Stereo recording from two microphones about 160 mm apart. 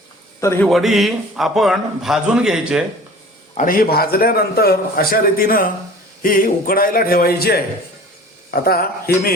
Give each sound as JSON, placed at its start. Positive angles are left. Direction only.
{"t": 0.3, "sound": "a man's voice", "side_deg": 15}
{"t": 0.7, "sound": "a man's voice", "side_deg": 0}
{"t": 3.6, "sound": "a man's voice", "side_deg": 65}